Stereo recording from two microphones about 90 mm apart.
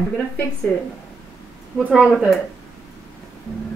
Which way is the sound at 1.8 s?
15° right (ahead or behind).